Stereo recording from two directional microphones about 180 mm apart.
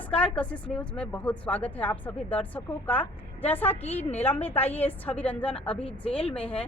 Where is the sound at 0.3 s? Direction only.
5° left (ahead or behind).